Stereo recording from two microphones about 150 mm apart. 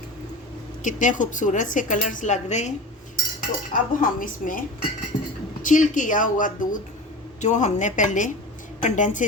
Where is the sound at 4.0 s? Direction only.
65° left (ahead or behind).